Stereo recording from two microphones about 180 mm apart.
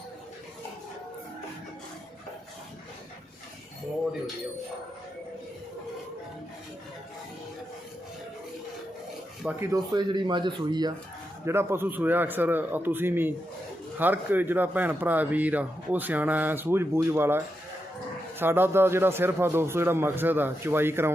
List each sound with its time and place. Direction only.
9.4 s speech: 5° right (ahead or behind)
9.6 s speech: 20° right (ahead or behind)
11.4 s speech: 15° right (ahead or behind)